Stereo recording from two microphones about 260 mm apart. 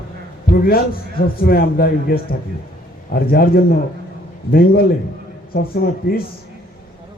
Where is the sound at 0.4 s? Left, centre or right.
Left.